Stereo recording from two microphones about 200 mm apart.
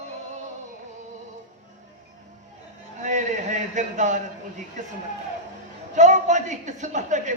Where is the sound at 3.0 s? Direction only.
35° right (ahead or behind).